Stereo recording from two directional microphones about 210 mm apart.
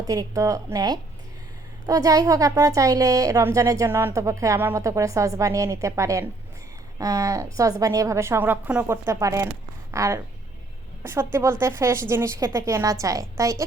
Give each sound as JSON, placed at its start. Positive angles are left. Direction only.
{"t": 0.0, "sound": "a woman's voice", "side_deg": -15}